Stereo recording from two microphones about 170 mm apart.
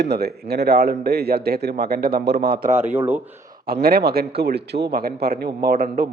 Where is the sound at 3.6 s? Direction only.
65° right (ahead or behind).